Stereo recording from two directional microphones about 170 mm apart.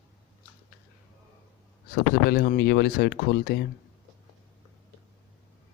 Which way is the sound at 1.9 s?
65° left (ahead or behind).